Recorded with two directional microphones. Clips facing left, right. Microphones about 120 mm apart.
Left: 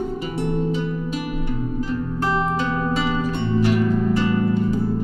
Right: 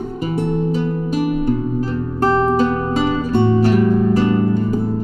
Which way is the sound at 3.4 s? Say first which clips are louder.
Right 7 dB; 55° right (ahead or behind).